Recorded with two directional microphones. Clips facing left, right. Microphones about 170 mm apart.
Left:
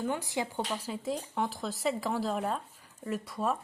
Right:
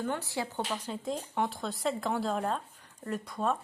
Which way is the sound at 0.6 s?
Centre (ahead or behind).